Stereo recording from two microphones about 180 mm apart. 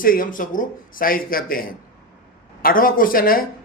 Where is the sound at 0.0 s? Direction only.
50° left (ahead or behind).